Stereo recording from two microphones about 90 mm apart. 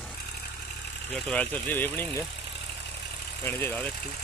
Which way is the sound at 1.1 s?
10° left (ahead or behind).